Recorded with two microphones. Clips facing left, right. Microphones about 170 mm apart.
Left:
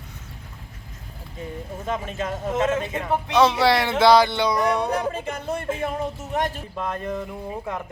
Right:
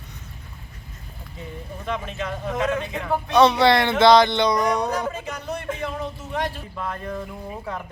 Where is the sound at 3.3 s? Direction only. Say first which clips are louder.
Right 2 dB; centre (ahead or behind).